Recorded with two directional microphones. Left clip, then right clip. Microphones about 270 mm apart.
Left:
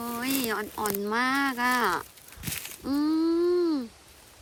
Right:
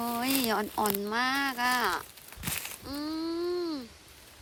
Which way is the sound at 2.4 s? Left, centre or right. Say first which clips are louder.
Right 1 dB; centre.